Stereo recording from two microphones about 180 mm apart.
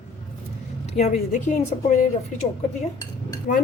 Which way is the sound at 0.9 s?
40° left (ahead or behind).